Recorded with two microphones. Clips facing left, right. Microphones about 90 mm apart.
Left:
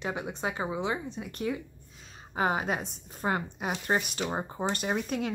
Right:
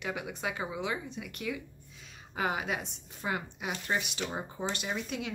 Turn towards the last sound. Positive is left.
turn(degrees=45)  # may be behind; listen again after turning